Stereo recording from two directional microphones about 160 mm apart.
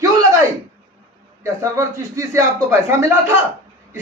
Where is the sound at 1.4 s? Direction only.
20° right (ahead or behind).